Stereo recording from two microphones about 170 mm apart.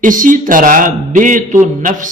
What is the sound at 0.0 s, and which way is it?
A man's voice, 50° right (ahead or behind).